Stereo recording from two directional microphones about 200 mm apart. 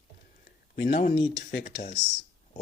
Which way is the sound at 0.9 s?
30° left (ahead or behind).